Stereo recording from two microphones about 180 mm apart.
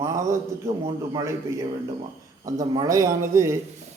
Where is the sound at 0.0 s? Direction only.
15° right (ahead or behind).